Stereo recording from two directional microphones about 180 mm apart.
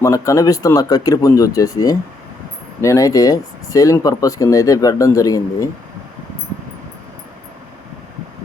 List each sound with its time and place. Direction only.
0.0 s speech: 20° left (ahead or behind)